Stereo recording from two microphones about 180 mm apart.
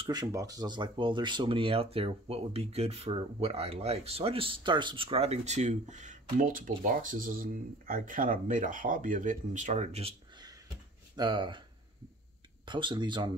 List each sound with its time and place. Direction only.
0.0 s speech: 20° right (ahead or behind); by 10.1 s 35° right (ahead or behind)
10.3 s a sound: 20° right (ahead or behind)
11.1 s speech: 25° right (ahead or behind)
12.6 s speech: 25° right (ahead or behind)